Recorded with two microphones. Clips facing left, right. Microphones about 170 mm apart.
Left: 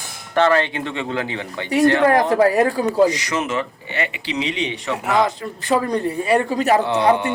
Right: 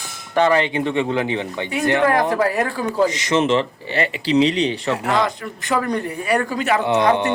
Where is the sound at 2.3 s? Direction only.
40° left (ahead or behind).